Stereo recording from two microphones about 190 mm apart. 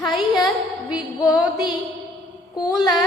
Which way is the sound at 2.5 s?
20° left (ahead or behind).